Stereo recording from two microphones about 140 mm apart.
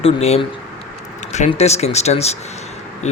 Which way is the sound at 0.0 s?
45° left (ahead or behind).